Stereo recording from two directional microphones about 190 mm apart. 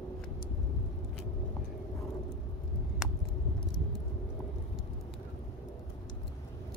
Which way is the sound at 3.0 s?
5° right (ahead or behind).